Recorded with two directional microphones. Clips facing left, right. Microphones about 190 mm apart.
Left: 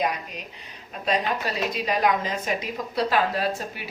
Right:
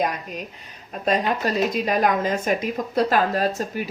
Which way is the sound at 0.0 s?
45° right (ahead or behind).